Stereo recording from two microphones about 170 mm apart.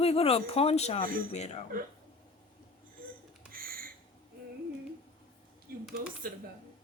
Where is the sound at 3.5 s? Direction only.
60° right (ahead or behind).